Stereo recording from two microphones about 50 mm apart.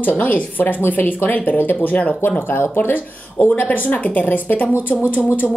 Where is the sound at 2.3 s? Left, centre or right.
Left.